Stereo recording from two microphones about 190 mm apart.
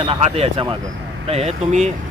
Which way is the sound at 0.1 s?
30° right (ahead or behind).